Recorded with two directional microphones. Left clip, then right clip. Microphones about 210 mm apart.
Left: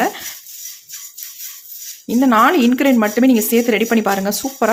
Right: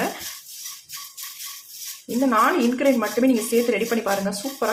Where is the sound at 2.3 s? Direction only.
50° left (ahead or behind).